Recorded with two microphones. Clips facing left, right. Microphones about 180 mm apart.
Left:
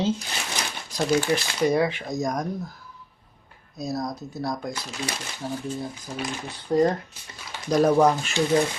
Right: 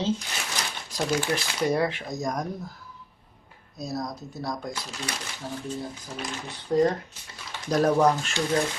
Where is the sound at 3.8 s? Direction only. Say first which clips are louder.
Left 3 dB; centre (ahead or behind).